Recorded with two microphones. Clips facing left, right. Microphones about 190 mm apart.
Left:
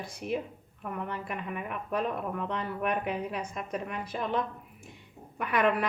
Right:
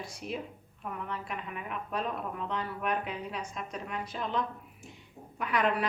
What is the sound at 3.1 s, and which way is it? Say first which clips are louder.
A woman's voice: left 5 dB; 55° left (ahead or behind).